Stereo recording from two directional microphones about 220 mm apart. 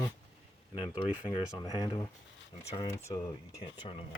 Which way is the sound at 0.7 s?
20° left (ahead or behind).